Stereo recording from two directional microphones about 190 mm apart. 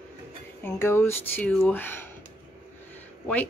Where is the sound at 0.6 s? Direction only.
15° left (ahead or behind).